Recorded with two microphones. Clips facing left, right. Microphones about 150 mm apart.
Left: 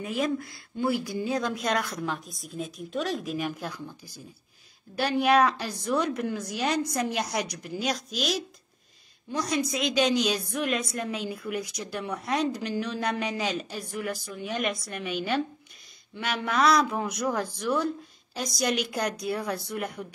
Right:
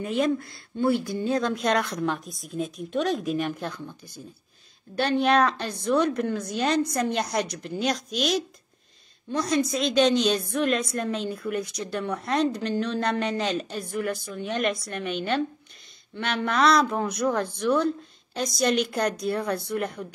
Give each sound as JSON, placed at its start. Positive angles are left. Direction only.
{"t": 0.0, "sound": "a woman's voice", "side_deg": 0}
{"t": 19.5, "sound": "speech", "side_deg": -60}